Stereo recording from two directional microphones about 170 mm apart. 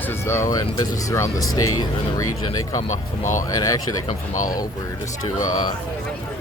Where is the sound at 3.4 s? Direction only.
20° left (ahead or behind).